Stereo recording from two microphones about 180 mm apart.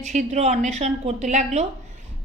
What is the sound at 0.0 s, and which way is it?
A woman's voice, 40° right (ahead or behind).